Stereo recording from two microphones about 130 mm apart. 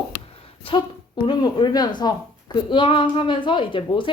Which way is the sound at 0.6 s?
40° left (ahead or behind).